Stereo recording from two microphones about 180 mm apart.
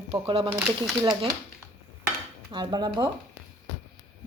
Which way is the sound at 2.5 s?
25° right (ahead or behind).